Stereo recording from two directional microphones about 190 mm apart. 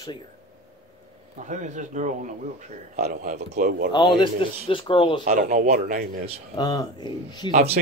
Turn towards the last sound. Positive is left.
turn(degrees=20)  # may be behind; listen again after turning